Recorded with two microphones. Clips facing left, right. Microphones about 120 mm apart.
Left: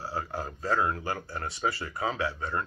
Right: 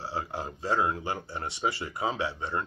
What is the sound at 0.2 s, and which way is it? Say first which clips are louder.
Speech: even; 20° right (ahead or behind).